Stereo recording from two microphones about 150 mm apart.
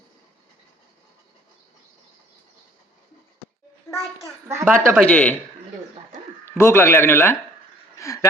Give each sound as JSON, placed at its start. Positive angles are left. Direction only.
{"t": 4.4, "sound": "a woman's voice", "side_deg": -20}
{"t": 4.9, "sound": "a man's voice", "side_deg": 10}
{"t": 6.6, "sound": "a man's voice", "side_deg": 15}
{"t": 7.9, "sound": "a sound", "side_deg": 20}